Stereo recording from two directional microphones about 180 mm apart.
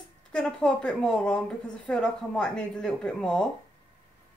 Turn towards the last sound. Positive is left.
turn(degrees=5)  # may be behind; listen again after turning